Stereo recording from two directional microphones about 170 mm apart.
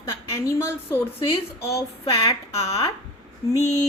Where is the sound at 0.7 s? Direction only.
15° left (ahead or behind).